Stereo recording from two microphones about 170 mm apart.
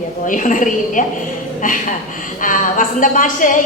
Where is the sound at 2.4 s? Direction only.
50° left (ahead or behind).